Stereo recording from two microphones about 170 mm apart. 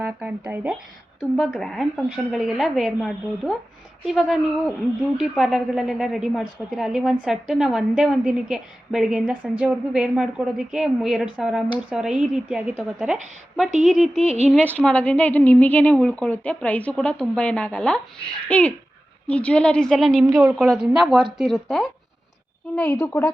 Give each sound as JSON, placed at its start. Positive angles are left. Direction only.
{"t": 0.0, "sound": "speech", "side_deg": -10}
{"t": 1.4, "sound": "a woman's voice", "side_deg": 5}
{"t": 2.0, "sound": "a woman's voice", "side_deg": -10}
{"t": 14.2, "sound": "speech", "side_deg": -40}
{"t": 14.5, "sound": "a woman's voice", "side_deg": 10}